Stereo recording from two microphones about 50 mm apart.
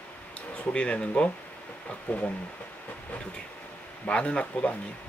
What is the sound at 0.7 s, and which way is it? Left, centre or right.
Speech, left.